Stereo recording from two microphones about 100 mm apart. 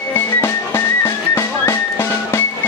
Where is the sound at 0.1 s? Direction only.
25° left (ahead or behind).